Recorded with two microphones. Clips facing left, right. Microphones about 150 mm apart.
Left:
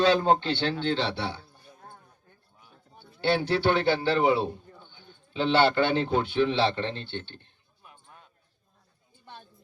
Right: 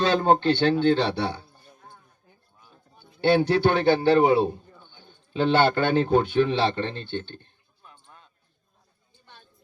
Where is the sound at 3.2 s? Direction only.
45° right (ahead or behind).